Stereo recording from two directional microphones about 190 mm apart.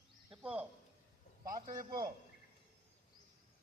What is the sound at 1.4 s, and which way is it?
Speech, 45° right (ahead or behind).